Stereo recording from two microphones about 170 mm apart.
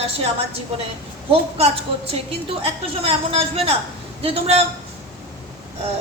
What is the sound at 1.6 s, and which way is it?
A woman's voice, 35° right (ahead or behind).